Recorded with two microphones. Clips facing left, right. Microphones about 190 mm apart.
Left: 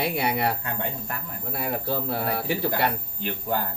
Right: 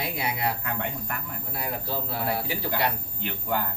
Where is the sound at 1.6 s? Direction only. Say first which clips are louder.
Left 4 dB; 55° left (ahead or behind).